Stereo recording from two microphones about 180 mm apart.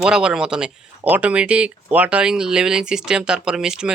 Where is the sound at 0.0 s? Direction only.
5° right (ahead or behind).